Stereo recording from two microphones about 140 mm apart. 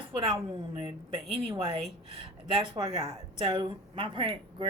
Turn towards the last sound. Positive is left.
turn(degrees=-40)  # may be behind; listen again after turning